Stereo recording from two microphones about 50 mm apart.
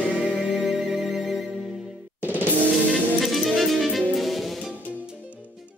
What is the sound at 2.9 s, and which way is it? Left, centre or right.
Music, centre.